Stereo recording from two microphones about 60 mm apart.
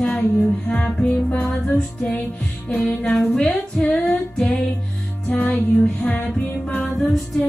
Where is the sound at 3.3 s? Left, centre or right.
Centre.